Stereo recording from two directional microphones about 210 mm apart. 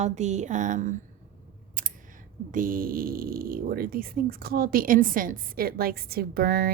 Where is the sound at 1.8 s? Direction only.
40° right (ahead or behind).